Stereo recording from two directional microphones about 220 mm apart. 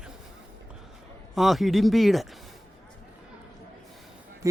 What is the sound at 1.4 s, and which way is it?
Speech, centre (ahead or behind).